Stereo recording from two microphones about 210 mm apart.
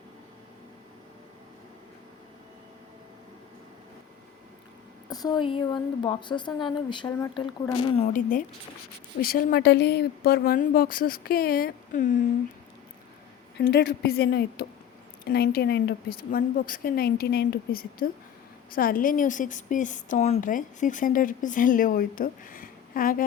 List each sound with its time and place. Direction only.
5.0 s a woman's voice: 20° left (ahead or behind); by 12.0 s 45° left (ahead or behind)
13.6 s a woman's voice: 55° left (ahead or behind)